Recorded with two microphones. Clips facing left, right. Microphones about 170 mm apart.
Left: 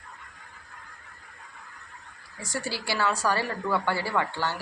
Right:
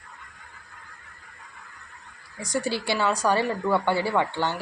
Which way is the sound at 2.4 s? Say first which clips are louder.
Right 6 dB; 20° right (ahead or behind).